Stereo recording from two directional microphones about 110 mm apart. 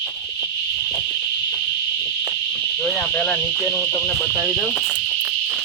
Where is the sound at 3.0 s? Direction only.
15° left (ahead or behind).